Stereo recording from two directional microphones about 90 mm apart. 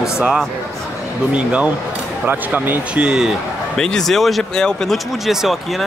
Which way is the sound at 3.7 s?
5° left (ahead or behind).